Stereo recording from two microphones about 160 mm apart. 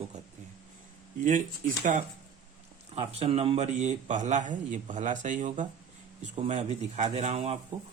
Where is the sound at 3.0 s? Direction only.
40° right (ahead or behind).